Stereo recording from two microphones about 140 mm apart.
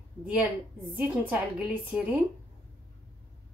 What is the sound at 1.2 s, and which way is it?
Speech, 10° right (ahead or behind).